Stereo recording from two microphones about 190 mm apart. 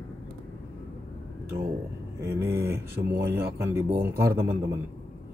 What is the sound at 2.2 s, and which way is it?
Speech, 10° right (ahead or behind).